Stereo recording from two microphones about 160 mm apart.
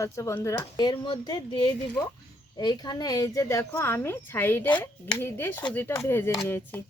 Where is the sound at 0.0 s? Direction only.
20° left (ahead or behind).